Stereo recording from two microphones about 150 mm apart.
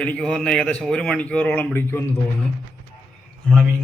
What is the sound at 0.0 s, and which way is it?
Speech, 5° left (ahead or behind).